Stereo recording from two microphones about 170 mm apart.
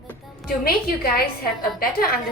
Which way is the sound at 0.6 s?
60° left (ahead or behind).